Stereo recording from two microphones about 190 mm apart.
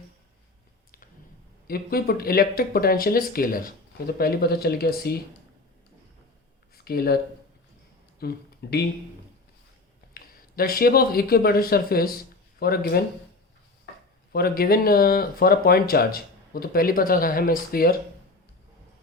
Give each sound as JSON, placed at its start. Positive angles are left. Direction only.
{"t": 1.6, "sound": "speech", "side_deg": 50}
{"t": 6.8, "sound": "speech", "side_deg": 55}
{"t": 8.2, "sound": "speech", "side_deg": 55}
{"t": 10.2, "sound": "speech", "side_deg": 50}
{"t": 14.3, "sound": "speech", "side_deg": 55}